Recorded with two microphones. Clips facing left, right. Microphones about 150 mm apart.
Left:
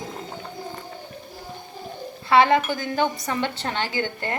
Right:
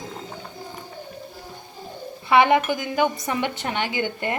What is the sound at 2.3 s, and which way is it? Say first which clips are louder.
A woman's voice: even; 20° right (ahead or behind).